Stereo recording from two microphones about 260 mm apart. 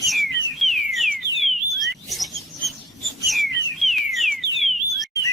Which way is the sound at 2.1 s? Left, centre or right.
Centre.